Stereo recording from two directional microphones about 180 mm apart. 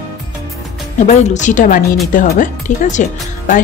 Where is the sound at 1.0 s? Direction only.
45° left (ahead or behind).